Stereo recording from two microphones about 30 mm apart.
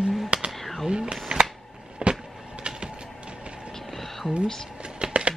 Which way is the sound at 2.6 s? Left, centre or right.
Right.